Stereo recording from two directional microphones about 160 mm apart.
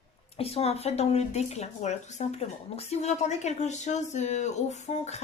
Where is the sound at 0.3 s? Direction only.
40° left (ahead or behind).